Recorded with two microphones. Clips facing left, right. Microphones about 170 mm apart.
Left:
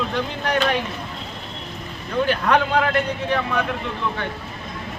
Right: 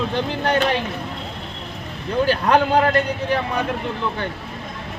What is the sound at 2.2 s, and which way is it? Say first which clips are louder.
Speech: right 2 dB; 35° right (ahead or behind).